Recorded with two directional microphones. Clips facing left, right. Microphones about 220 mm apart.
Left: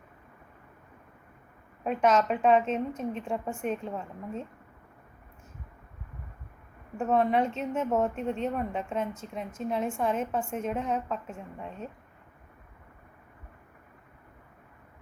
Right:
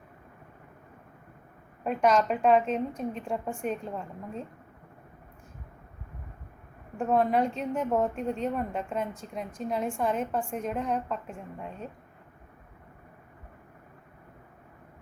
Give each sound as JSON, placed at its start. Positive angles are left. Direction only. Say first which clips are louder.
{"t": 1.8, "sound": "a woman's voice", "louder": "even", "side_deg": 0}
{"t": 6.9, "sound": "a woman's voice", "louder": "even", "side_deg": 0}